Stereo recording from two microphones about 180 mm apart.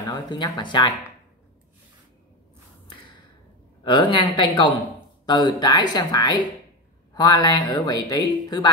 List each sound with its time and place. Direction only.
0.1 s speech: 25° left (ahead or behind)
3.8 s speech: 25° left (ahead or behind)